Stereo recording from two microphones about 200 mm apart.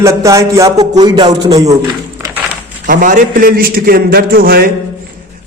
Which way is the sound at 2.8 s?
40° right (ahead or behind).